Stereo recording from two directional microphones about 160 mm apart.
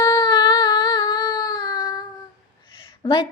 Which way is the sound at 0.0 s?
30° left (ahead or behind).